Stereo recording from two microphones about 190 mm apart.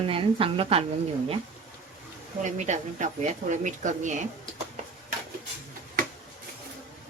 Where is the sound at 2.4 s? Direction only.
40° right (ahead or behind).